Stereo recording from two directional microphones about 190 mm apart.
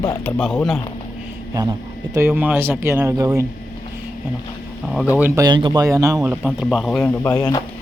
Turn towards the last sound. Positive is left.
turn(degrees=20)  # may be behind; listen again after turning